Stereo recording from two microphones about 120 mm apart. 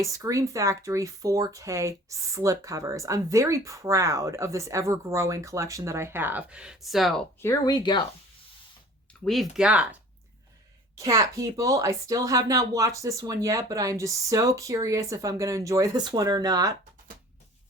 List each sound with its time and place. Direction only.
0.0 s speech: 25° right (ahead or behind); by 7.2 s centre (ahead or behind)
7.4 s speech: 30° left (ahead or behind)
9.2 s speech: centre (ahead or behind)
10.9 s speech: 30° right (ahead or behind)